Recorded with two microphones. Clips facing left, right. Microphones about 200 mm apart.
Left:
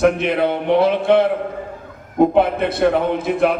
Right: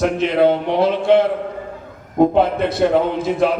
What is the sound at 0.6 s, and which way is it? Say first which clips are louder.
Speech: left 1 dB; 55° left (ahead or behind).